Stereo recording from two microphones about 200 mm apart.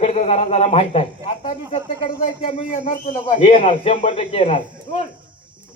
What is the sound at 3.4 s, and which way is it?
Speech, 30° left (ahead or behind).